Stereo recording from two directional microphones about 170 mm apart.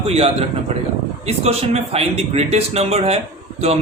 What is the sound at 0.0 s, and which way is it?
A man's voice, 35° right (ahead or behind).